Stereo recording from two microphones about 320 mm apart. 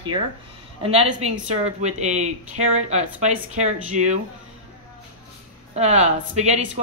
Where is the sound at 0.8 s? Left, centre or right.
Centre.